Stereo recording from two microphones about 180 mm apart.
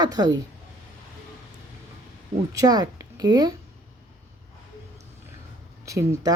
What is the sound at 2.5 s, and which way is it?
A woman's voice, 20° right (ahead or behind).